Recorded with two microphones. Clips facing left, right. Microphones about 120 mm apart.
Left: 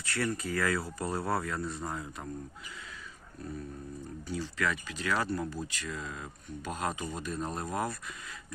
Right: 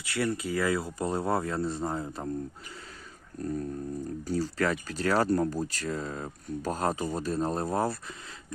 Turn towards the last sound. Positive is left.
turn(degrees=-30)  # may be behind; listen again after turning